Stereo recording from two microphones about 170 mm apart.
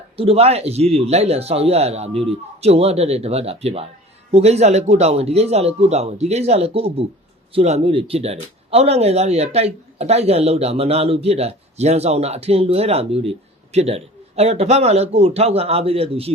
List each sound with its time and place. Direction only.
0.2 s speech: 35° right (ahead or behind)